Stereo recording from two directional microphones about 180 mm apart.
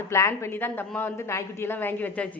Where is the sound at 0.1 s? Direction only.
15° left (ahead or behind).